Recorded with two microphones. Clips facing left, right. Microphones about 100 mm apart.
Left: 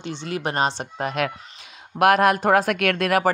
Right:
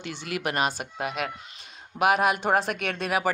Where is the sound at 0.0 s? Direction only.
20° left (ahead or behind).